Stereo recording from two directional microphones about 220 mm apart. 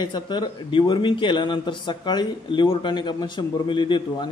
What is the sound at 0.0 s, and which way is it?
A man's voice, 20° left (ahead or behind).